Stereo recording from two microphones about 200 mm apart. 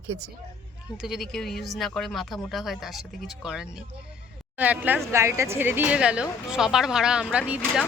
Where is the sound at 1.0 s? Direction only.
Centre (ahead or behind).